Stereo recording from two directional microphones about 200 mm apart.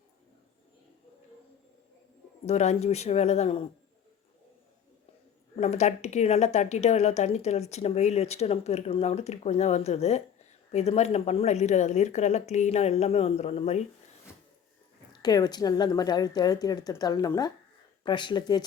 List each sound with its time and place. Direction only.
2.5 s speech: 35° left (ahead or behind)
5.5 s speech: 35° left (ahead or behind)
15.2 s speech: 20° left (ahead or behind)